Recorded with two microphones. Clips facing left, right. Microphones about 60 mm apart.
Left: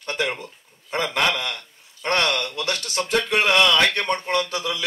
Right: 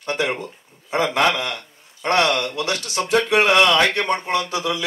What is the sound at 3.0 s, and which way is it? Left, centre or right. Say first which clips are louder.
Speech: right 4 dB; right.